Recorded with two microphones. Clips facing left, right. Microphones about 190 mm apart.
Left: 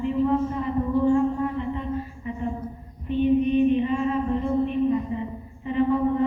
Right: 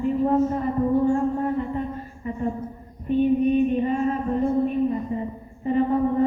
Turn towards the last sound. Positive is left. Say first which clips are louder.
# right 1 dB
turn(degrees=-40)  # may be behind; listen again after turning